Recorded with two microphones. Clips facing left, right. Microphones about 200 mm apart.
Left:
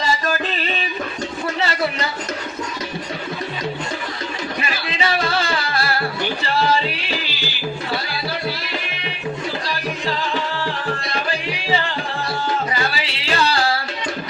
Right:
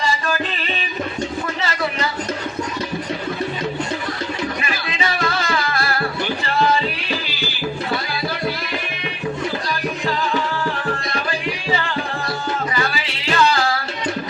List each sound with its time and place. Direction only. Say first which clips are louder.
0.0 s music: left 1 dB; 40° left (ahead or behind)
4.6 s music: left 1 dB; 30° left (ahead or behind)
13.3 s music: right 3 dB; 35° left (ahead or behind)